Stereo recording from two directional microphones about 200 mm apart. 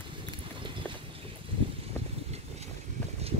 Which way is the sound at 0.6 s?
25° right (ahead or behind).